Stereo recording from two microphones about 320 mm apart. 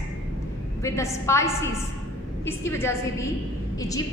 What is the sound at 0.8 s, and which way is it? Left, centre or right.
A woman's voice, centre.